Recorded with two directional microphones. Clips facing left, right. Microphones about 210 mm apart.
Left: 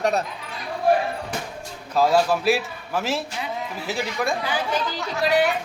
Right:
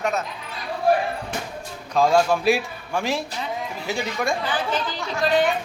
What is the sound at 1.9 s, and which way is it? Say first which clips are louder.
A man's voice: right 1 dB; 5° left (ahead or behind).